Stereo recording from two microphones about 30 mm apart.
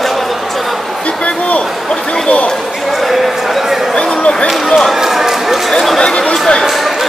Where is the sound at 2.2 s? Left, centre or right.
Left.